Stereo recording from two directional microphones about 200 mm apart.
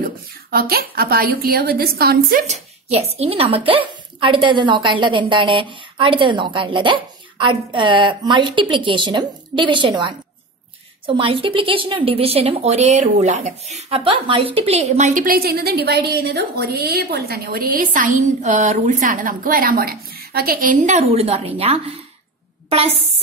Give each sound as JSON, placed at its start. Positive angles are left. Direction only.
{"t": 0.0, "sound": "a woman's voice", "side_deg": -50}
{"t": 2.9, "sound": "a woman's voice", "side_deg": -30}